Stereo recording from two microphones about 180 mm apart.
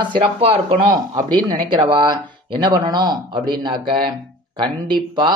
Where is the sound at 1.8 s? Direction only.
25° right (ahead or behind).